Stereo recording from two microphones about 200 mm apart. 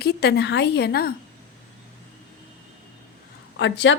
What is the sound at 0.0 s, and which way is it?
A woman's voice, 55° left (ahead or behind).